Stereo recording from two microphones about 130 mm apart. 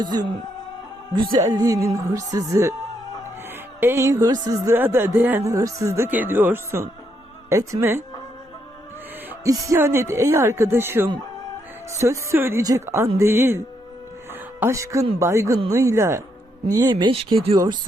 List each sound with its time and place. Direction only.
0.0 s speech: 30° right (ahead or behind)
1.5 s speech: 25° right (ahead or behind)
3.8 s speech: 20° right (ahead or behind)
9.4 s speech: 25° right (ahead or behind)
14.6 s speech: 20° right (ahead or behind)
16.9 s speech: 40° right (ahead or behind)